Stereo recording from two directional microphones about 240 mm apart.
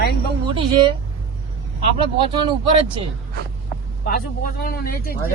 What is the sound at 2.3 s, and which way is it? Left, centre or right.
Speech, right.